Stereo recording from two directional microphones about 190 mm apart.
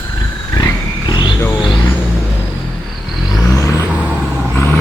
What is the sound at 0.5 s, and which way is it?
Vehicle, 20° left (ahead or behind).